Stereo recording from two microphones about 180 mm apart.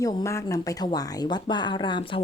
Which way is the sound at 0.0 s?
20° left (ahead or behind).